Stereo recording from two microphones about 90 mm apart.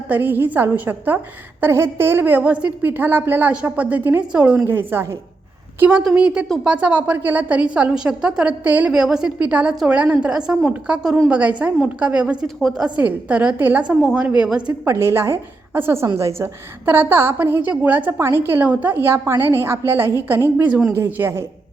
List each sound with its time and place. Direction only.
0.1 s a woman's voice: 20° right (ahead or behind)
4.6 s a woman's voice: 25° right (ahead or behind)
5.9 s a woman's voice: 10° right (ahead or behind)
8.9 s a woman's voice: 5° right (ahead or behind)
14.8 s a woman's voice: 30° right (ahead or behind)